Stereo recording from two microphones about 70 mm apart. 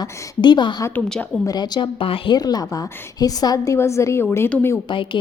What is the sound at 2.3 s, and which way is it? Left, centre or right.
A woman's voice, left.